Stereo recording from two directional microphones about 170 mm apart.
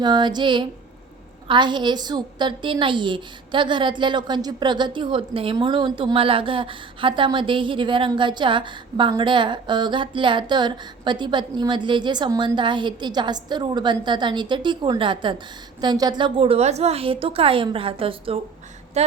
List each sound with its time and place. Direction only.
0.0 s a woman's voice: 25° right (ahead or behind)